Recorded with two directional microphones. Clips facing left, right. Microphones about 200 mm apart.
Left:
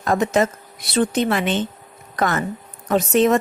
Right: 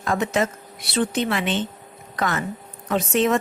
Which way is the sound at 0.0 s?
40° left (ahead or behind).